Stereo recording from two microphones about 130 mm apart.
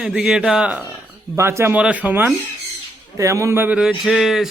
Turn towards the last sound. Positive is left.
turn(degrees=-5)  # may be behind; listen again after turning